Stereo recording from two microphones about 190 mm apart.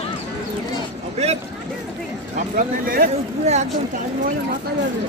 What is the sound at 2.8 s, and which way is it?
Speech, 50° right (ahead or behind).